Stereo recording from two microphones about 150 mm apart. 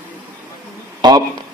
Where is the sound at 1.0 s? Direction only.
30° right (ahead or behind).